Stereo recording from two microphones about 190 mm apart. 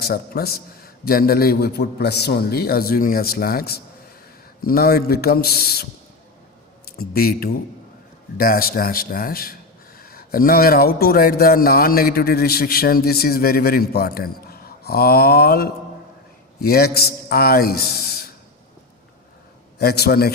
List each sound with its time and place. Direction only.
0.0 s a man's voice: 55° left (ahead or behind)
7.0 s a man's voice: 50° left (ahead or behind)
19.8 s a man's voice: 55° left (ahead or behind)